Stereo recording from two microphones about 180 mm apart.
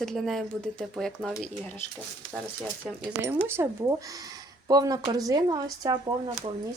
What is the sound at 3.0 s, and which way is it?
Speech, 10° right (ahead or behind).